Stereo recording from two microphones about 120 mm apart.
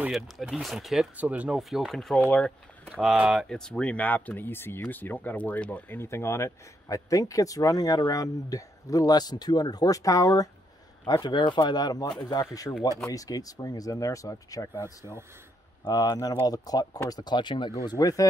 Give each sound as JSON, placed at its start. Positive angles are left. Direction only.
{"t": 0.1, "sound": "speech", "side_deg": 0}